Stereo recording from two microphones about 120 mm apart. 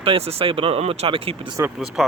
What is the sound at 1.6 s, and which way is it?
Speech, 25° right (ahead or behind).